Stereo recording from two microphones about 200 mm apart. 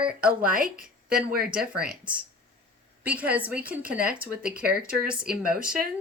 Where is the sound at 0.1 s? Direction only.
50° right (ahead or behind).